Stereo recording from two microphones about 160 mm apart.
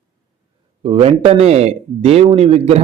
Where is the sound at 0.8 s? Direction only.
40° right (ahead or behind).